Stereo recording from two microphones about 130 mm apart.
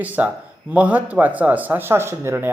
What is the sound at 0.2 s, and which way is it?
Speech, 15° right (ahead or behind).